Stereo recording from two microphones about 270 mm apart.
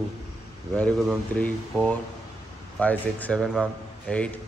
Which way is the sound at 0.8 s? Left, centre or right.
Centre.